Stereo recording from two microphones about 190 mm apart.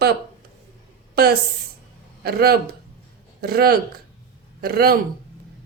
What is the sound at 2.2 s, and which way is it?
A man's voice, 55° right (ahead or behind).